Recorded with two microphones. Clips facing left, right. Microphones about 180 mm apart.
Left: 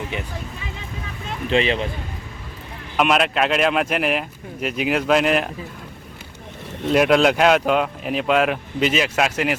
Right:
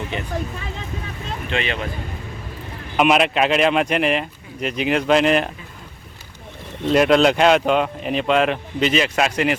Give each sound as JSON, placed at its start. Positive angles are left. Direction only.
{"t": 1.5, "sound": "speech", "side_deg": 30}
{"t": 3.0, "sound": "speech", "side_deg": 0}
{"t": 6.8, "sound": "speech", "side_deg": 5}